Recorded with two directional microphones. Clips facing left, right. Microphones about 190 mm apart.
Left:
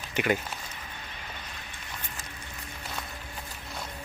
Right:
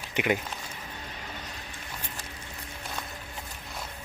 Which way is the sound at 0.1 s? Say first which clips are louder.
Even; 20° right (ahead or behind).